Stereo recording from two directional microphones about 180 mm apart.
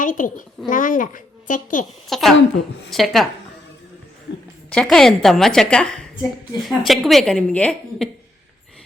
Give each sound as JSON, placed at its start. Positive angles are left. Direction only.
{"t": 0.0, "sound": "a woman's voice", "side_deg": 45}
{"t": 2.0, "sound": "a woman's voice", "side_deg": 0}
{"t": 4.7, "sound": "a woman's voice", "side_deg": 0}